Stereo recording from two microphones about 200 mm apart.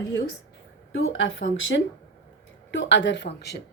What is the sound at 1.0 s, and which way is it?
A woman's voice, 75° left (ahead or behind).